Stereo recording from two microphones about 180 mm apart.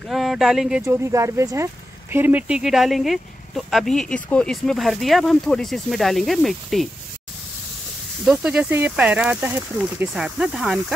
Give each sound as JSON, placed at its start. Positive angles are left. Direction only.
{"t": 0.1, "sound": "speech", "side_deg": 0}
{"t": 0.8, "sound": "speech", "side_deg": -15}
{"t": 8.3, "sound": "speech", "side_deg": -5}